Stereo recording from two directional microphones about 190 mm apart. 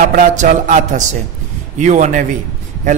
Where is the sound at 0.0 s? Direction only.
45° right (ahead or behind).